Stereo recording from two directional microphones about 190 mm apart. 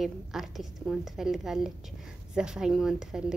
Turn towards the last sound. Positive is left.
turn(degrees=-5)  # may be behind; listen again after turning